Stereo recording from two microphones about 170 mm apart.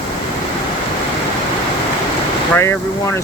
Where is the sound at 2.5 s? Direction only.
15° left (ahead or behind).